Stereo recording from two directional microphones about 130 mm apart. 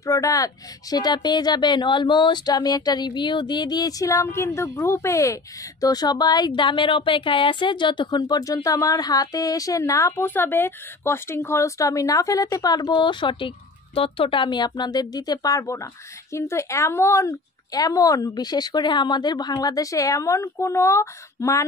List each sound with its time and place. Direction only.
0.0 s speech: 25° left (ahead or behind)